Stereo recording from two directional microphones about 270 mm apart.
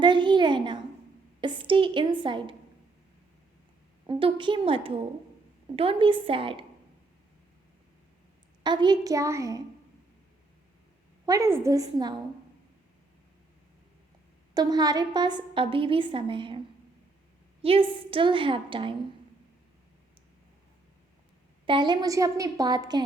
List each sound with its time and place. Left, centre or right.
0.0 s a sound: centre
1.4 s a woman's voice: centre
4.0 s a woman's voice: centre
8.6 s a woman's voice: centre
11.3 s a woman's voice: centre
14.5 s a woman's voice: centre
17.6 s a woman's voice: centre
21.7 s a woman's voice: centre